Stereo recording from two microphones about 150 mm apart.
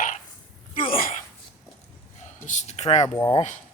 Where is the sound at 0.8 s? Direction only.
65° left (ahead or behind).